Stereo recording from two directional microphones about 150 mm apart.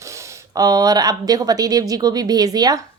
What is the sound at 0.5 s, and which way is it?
Speech, 25° right (ahead or behind).